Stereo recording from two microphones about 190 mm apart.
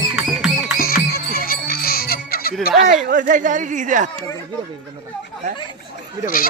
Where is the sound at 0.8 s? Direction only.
50° left (ahead or behind).